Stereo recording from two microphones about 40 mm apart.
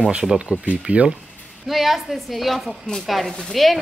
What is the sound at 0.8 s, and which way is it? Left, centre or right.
Speech, right.